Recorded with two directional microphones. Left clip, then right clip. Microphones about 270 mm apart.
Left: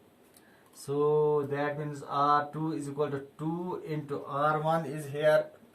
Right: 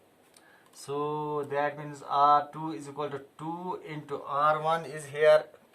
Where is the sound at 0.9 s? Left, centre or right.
Centre.